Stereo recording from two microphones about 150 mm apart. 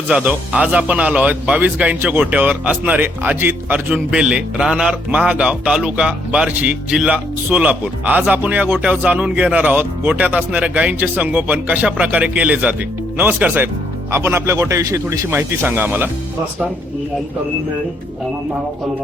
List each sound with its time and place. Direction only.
0.1 s speech: 10° right (ahead or behind)